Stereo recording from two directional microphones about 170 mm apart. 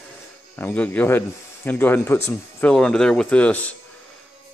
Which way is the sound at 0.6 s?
10° left (ahead or behind).